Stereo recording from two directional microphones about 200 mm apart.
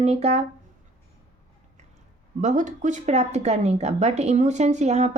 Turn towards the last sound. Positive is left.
turn(degrees=-35)  # may be behind; listen again after turning